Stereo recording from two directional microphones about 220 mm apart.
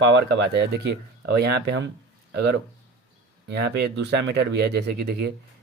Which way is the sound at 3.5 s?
50° right (ahead or behind).